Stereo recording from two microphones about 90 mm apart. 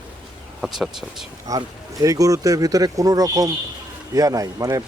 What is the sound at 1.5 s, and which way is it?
Speech, 40° right (ahead or behind).